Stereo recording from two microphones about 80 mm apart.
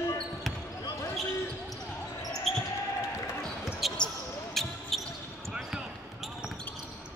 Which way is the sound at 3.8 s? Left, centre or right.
Centre.